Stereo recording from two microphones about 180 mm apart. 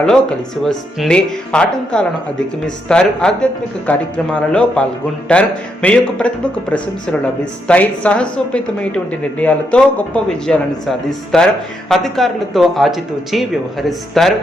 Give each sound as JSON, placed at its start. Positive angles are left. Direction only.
{"t": 0.0, "sound": "a woman's voice", "side_deg": 5}